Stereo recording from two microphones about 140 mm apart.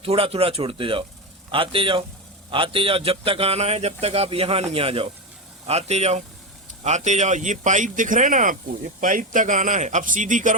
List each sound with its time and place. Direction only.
0.0 s a man's voice: 40° right (ahead or behind); by 10.5 s 65° right (ahead or behind)